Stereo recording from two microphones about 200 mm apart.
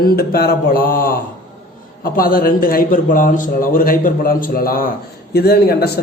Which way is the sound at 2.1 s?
45° left (ahead or behind).